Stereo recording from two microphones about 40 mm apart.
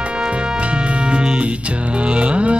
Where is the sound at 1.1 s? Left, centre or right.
Right.